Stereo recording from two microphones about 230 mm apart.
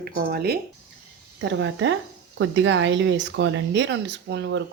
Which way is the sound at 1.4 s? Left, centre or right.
Right.